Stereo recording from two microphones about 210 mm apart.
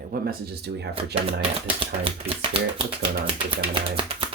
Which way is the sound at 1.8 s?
25° right (ahead or behind).